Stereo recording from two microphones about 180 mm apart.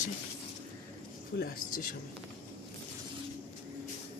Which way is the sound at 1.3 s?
60° left (ahead or behind).